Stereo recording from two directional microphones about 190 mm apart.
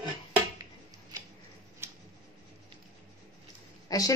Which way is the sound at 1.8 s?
15° right (ahead or behind).